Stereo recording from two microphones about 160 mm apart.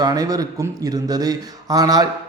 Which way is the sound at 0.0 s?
25° right (ahead or behind).